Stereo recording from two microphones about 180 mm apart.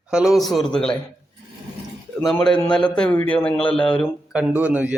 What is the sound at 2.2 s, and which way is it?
A man's voice, 5° left (ahead or behind).